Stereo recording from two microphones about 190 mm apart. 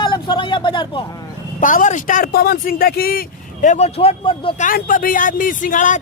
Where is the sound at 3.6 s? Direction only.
35° left (ahead or behind).